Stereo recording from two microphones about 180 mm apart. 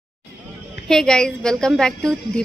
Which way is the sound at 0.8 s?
5° left (ahead or behind).